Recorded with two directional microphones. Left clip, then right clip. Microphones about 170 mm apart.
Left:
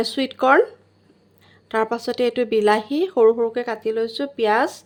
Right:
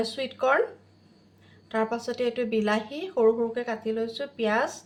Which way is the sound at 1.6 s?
80° left.